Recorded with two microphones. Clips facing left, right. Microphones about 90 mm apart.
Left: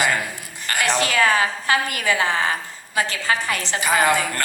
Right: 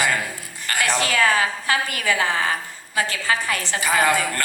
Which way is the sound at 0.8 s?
20° left (ahead or behind).